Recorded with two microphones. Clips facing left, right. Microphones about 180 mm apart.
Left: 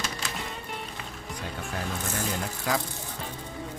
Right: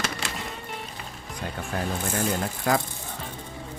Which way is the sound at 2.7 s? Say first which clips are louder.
Right 5 dB; 50° right (ahead or behind).